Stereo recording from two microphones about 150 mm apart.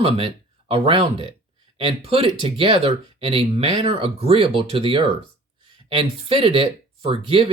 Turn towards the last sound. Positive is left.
turn(degrees=-40)  # may be behind; listen again after turning